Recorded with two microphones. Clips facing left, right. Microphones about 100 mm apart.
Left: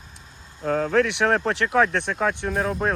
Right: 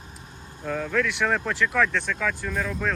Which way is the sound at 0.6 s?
60° left (ahead or behind).